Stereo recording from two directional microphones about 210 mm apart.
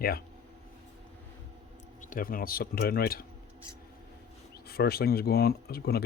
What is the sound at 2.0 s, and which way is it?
Speech, 40° left (ahead or behind).